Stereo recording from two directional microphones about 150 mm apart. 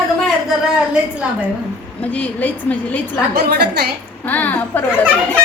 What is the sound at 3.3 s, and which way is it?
Speech, 90° right.